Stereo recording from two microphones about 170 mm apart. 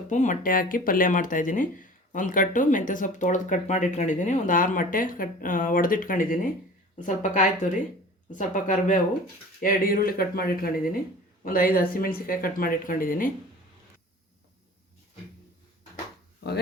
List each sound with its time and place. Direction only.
0.1 s speech: 45° left (ahead or behind)